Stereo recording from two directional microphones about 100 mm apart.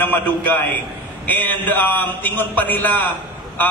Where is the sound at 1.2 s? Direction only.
20° left (ahead or behind).